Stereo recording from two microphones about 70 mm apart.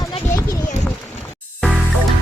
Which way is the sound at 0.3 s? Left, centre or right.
Left.